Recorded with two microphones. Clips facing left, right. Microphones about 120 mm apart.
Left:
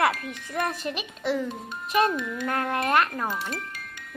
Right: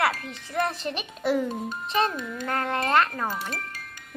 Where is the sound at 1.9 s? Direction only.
25° right (ahead or behind).